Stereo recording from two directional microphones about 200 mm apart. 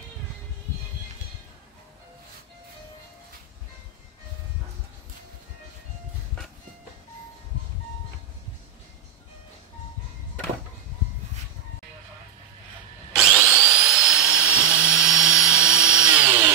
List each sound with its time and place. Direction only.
13.1 s drill: centre (ahead or behind)
13.4 s tools: 10° right (ahead or behind)
13.7 s vacuum cleaner: 5° right (ahead or behind)